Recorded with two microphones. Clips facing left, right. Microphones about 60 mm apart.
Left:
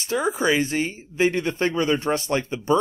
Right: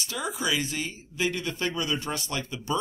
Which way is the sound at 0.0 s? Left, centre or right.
Left.